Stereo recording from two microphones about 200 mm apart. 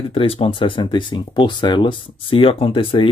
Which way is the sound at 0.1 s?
30° left (ahead or behind).